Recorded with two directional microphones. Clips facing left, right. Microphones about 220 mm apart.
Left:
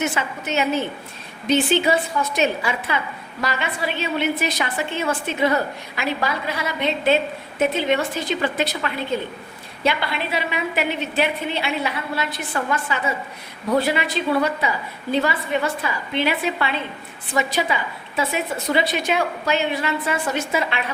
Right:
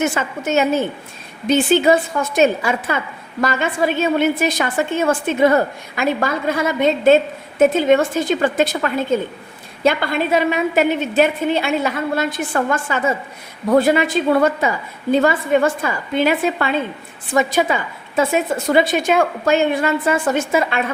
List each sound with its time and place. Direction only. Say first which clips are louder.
0.0 s a woman's voice: right 5 dB; 45° right (ahead or behind)